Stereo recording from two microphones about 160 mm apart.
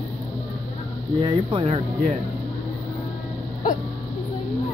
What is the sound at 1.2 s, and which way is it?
Speech, 30° right (ahead or behind).